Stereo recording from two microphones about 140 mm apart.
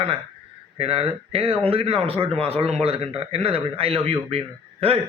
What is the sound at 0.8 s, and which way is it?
Speech, 45° right (ahead or behind).